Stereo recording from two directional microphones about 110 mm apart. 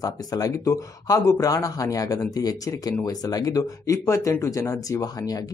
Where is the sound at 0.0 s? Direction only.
35° left (ahead or behind).